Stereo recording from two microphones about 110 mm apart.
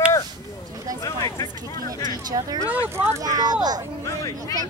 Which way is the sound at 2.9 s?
25° right (ahead or behind).